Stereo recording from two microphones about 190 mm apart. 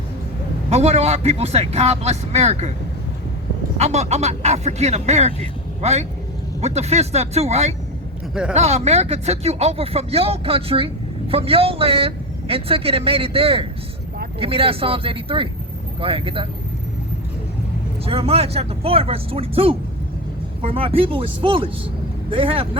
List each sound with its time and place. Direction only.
0.7 s speech: 35° right (ahead or behind)
3.8 s speech: 35° right (ahead or behind)
18.0 s speech: 30° right (ahead or behind)